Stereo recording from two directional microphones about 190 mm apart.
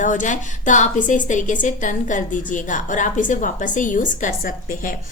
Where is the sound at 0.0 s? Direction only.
40° left (ahead or behind).